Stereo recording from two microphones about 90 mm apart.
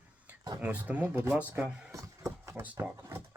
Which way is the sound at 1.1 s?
30° right (ahead or behind).